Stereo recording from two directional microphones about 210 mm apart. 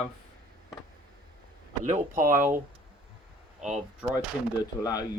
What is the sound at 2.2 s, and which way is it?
Speech, 10° right (ahead or behind).